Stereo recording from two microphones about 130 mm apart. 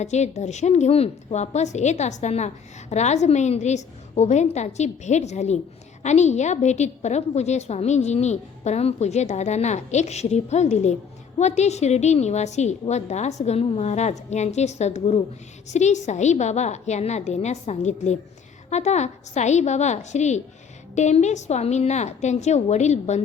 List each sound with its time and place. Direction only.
0.0 s a woman's voice: 60° left (ahead or behind)